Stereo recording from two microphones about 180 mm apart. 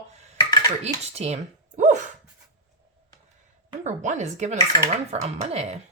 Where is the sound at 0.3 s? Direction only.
20° left (ahead or behind).